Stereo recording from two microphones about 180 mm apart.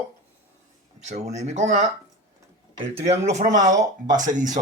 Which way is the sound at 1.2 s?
40° right (ahead or behind).